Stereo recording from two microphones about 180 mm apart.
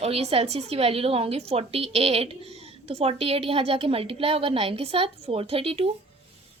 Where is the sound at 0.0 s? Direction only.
35° right (ahead or behind).